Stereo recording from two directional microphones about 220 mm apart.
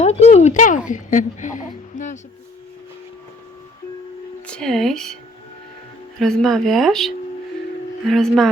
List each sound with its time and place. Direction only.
0.0 s speech: 30° left (ahead or behind)
4.4 s speech: 5° left (ahead or behind)
6.1 s speech: 5° left (ahead or behind)
8.1 s speech: centre (ahead or behind)